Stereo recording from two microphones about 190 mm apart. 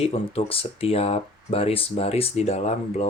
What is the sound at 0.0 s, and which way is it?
Speech, 30° left (ahead or behind).